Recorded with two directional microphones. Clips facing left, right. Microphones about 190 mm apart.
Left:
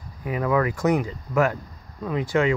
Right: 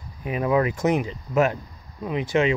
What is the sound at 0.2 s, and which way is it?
Speech, 20° right (ahead or behind).